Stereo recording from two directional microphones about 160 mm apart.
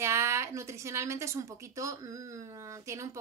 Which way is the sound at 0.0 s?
15° right (ahead or behind).